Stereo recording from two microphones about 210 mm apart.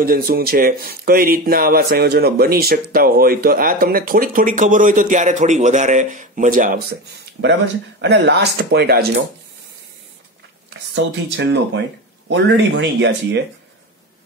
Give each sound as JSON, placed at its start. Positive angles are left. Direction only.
{"t": 0.0, "sound": "speech", "side_deg": -45}
{"t": 7.4, "sound": "speech", "side_deg": -60}
{"t": 8.0, "sound": "speech", "side_deg": -50}
{"t": 10.7, "sound": "speech", "side_deg": -55}